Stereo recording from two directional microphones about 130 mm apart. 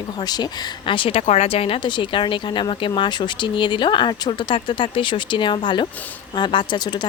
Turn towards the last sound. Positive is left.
turn(degrees=35)  # may be behind; listen again after turning